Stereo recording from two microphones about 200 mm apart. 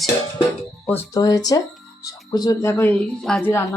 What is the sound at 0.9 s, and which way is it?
Speech, 15° left (ahead or behind).